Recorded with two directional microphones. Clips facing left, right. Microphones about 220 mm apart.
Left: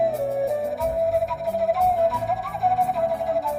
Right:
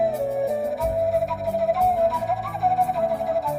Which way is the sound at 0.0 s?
Centre (ahead or behind).